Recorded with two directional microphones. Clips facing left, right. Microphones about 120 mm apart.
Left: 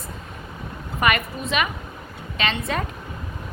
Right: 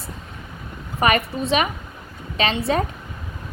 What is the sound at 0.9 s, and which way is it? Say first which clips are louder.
A woman's voice: right 3 dB; 35° right (ahead or behind).